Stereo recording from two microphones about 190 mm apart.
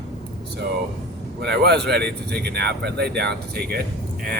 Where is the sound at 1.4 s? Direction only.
60° right (ahead or behind).